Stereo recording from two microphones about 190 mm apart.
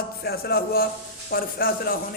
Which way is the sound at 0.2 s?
55° left (ahead or behind).